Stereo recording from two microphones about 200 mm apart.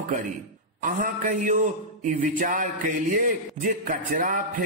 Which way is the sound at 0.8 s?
40° right (ahead or behind).